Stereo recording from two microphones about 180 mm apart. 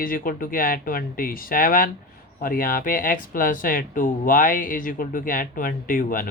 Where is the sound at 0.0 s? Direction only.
50° left (ahead or behind).